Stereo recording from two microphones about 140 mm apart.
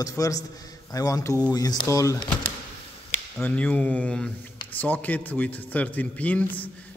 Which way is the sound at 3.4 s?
10° left (ahead or behind).